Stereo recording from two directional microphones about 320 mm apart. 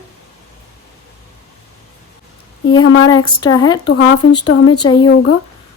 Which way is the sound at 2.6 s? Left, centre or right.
Left.